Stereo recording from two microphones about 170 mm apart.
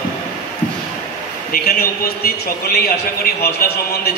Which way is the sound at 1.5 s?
65° left (ahead or behind).